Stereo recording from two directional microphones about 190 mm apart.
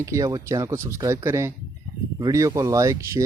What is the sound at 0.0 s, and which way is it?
Speech, 15° right (ahead or behind).